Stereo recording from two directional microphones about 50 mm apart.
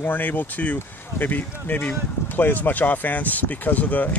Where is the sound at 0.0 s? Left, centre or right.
Left.